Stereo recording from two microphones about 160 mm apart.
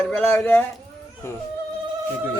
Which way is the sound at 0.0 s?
5° left (ahead or behind).